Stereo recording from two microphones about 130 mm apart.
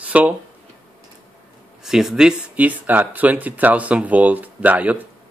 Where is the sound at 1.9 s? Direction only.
5° right (ahead or behind).